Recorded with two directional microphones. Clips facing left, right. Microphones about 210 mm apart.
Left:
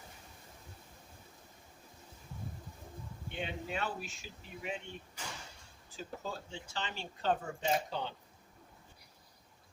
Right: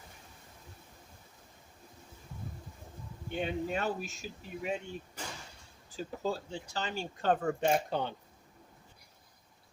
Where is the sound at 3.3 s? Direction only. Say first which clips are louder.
Right 6 dB; 45° right (ahead or behind).